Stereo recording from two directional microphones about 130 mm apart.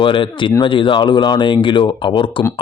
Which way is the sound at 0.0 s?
40° left (ahead or behind).